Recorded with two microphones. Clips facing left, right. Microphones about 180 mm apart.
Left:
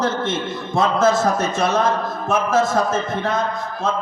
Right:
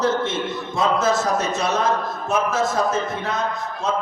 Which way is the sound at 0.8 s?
50° left (ahead or behind).